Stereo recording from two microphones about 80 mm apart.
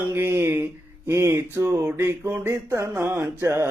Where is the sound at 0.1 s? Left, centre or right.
Right.